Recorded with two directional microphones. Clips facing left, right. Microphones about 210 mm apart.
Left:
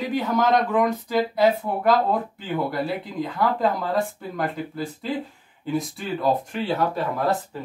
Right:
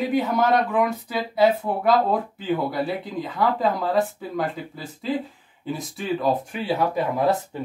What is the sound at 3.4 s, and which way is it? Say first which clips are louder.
Speech: right 1 dB; centre (ahead or behind).